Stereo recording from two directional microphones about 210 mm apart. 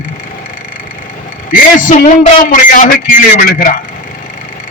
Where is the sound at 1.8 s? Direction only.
40° left (ahead or behind).